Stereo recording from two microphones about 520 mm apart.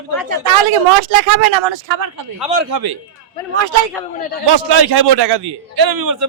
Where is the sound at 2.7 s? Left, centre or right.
Right.